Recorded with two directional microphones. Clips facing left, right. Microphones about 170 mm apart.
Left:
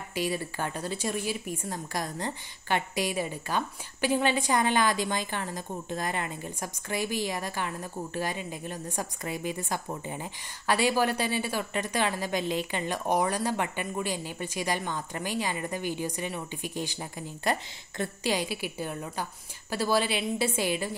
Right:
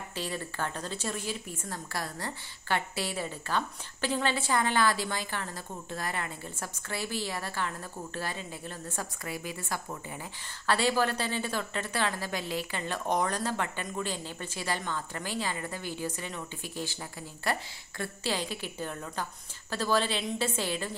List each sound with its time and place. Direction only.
0.1 s speech: 10° left (ahead or behind)